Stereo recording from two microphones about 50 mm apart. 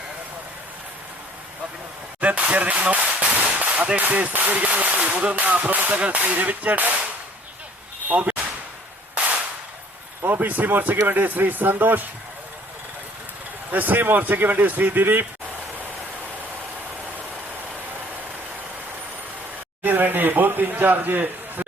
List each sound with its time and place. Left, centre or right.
2.2 s speech: right
8.1 s speech: right
10.2 s speech: right
13.7 s speech: right
19.8 s a sound: right